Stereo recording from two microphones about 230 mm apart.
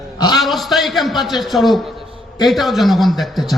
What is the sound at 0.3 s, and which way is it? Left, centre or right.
A man's voice, centre.